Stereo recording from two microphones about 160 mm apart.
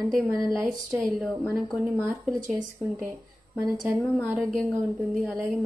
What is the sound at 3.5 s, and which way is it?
Speech, centre (ahead or behind).